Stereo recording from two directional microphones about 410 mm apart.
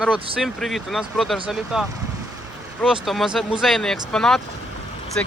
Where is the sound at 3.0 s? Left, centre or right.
Centre.